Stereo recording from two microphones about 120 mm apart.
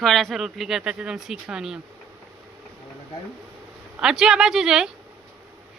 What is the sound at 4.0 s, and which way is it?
Speech, 5° right (ahead or behind).